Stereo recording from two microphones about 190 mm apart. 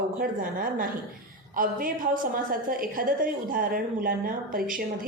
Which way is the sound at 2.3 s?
50° right (ahead or behind).